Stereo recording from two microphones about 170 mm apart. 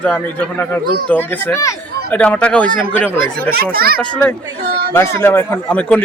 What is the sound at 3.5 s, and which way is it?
Speech, 60° right (ahead or behind).